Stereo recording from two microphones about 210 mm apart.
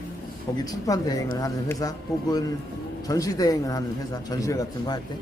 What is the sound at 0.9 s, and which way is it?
Speech, 15° left (ahead or behind).